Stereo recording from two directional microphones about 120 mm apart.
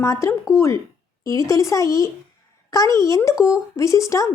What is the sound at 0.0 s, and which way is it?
A woman's voice, 25° left (ahead or behind).